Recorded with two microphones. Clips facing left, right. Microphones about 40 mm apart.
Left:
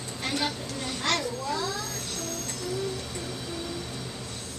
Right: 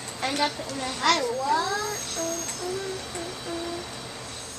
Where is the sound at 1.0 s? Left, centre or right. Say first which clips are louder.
Right 5 dB; right.